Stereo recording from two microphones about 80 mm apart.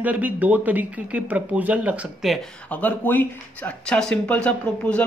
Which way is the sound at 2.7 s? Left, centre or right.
Left.